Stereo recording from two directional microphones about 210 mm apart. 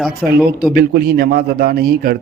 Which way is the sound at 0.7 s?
45° right (ahead or behind).